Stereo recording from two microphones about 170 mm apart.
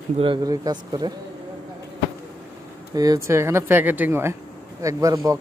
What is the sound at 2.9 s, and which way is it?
Speech, 20° right (ahead or behind).